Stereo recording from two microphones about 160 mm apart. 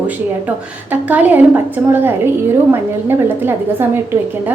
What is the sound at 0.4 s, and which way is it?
A woman's voice, 10° right (ahead or behind).